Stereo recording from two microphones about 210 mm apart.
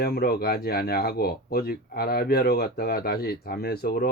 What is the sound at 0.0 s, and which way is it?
Speech, 45° left (ahead or behind).